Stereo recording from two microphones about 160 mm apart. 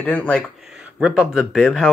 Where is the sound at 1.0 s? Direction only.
5° right (ahead or behind).